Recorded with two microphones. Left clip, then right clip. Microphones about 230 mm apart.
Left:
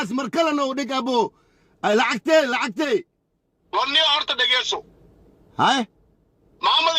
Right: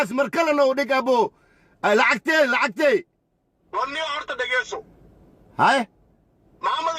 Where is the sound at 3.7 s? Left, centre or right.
Left.